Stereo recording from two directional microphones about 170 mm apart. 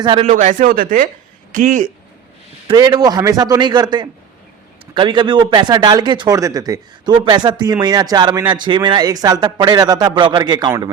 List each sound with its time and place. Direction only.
0.0 s a man's voice: 30° right (ahead or behind)
0.3 s speech: 50° right (ahead or behind)
2.6 s a man's voice: 25° right (ahead or behind)